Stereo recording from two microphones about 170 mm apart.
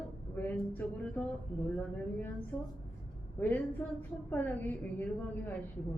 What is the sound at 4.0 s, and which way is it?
Speech, 10° left (ahead or behind).